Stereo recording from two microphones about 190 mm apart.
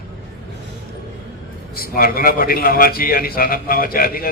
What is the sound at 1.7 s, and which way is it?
A man's voice, 50° left (ahead or behind).